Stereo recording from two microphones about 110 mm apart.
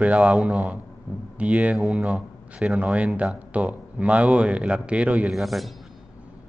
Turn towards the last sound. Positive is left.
turn(degrees=0)  # may be behind; listen again after turning